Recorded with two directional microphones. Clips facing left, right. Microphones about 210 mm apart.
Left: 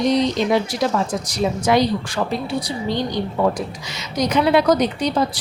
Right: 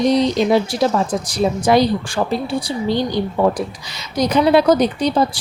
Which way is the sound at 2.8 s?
35° right (ahead or behind).